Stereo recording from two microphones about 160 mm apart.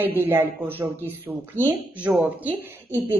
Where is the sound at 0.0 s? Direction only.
10° right (ahead or behind).